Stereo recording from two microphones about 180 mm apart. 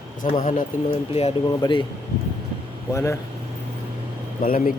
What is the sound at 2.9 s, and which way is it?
Speech, 15° left (ahead or behind).